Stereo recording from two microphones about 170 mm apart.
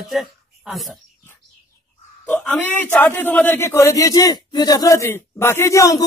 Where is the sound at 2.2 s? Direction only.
5° left (ahead or behind).